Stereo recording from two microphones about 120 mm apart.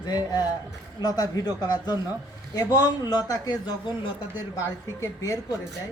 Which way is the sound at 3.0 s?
35° left (ahead or behind).